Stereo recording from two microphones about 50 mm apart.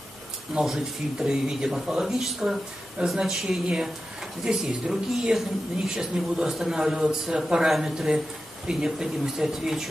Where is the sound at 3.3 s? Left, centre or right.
Centre.